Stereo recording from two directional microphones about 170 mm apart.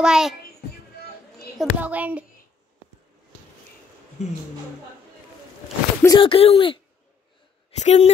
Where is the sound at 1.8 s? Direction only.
10° right (ahead or behind).